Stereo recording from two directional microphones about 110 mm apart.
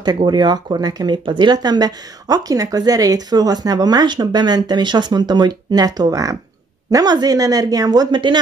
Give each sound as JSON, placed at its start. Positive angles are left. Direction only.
{"t": 0.0, "sound": "speech", "side_deg": -40}